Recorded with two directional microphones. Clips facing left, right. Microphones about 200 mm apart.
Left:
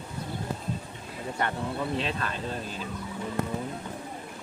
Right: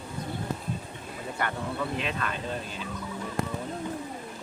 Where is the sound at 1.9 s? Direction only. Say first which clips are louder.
Left 1 dB; 35° left (ahead or behind).